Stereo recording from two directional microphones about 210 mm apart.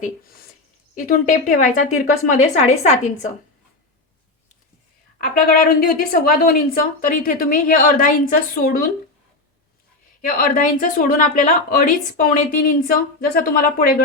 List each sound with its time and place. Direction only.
1.0 s speech: 40° left (ahead or behind)
5.1 s a woman's voice: 45° left (ahead or behind)
10.2 s speech: 40° left (ahead or behind)